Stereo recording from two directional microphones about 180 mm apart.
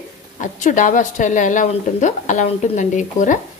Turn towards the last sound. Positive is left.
turn(degrees=45)  # may be behind; listen again after turning